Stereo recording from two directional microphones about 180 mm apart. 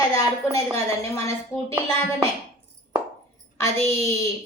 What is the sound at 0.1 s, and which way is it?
Speech, 15° left (ahead or behind).